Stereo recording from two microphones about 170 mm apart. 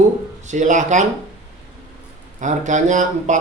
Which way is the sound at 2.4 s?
45° right (ahead or behind).